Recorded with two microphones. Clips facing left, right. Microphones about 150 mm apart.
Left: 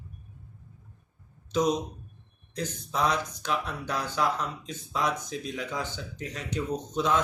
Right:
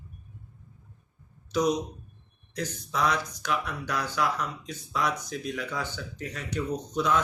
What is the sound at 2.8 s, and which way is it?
Speech, 30° left (ahead or behind).